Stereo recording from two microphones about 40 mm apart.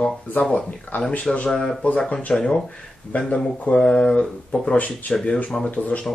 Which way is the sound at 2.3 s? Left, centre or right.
Left.